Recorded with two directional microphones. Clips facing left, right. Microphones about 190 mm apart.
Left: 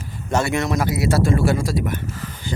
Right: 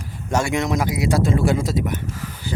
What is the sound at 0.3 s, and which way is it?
Speech, 10° right (ahead or behind).